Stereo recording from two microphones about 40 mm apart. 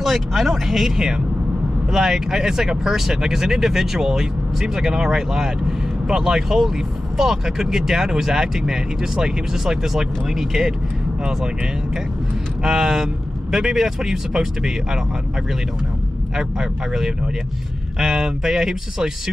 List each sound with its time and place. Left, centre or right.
0.0 s speech: centre
0.9 s speech: centre
11.2 s speech: centre
16.3 s speech: centre